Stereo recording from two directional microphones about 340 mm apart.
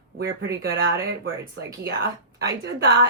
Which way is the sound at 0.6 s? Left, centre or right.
Right.